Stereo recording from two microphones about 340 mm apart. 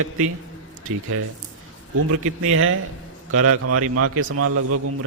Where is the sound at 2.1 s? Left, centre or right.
Right.